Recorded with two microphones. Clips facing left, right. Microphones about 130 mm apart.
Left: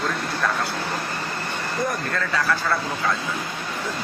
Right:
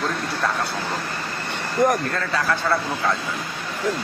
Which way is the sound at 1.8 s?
90° right.